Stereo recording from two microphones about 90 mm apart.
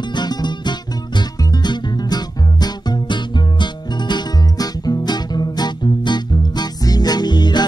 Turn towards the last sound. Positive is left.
turn(degrees=50)  # may be behind; listen again after turning